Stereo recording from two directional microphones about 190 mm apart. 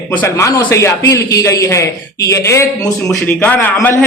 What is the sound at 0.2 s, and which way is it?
A man's voice, 15° left (ahead or behind).